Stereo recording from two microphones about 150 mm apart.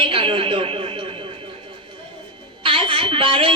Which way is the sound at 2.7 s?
35° right (ahead or behind).